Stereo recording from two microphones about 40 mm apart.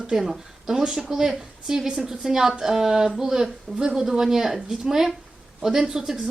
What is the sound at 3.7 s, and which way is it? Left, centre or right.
Speech, right.